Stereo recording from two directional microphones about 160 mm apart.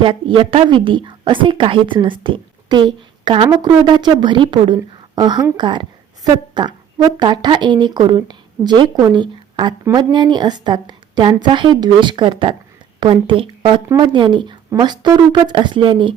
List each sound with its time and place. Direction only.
0.0 s a woman's voice: 30° right (ahead or behind)